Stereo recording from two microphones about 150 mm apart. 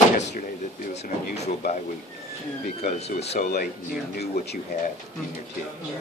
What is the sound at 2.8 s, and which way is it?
Speech, 45° left (ahead or behind).